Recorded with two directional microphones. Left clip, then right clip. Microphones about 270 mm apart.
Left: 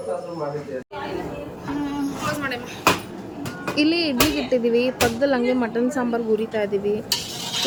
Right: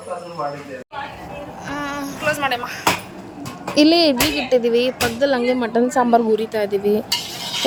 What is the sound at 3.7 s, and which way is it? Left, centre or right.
A woman's voice, centre.